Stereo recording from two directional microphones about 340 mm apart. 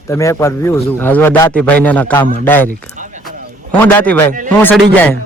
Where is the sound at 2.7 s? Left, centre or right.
Right.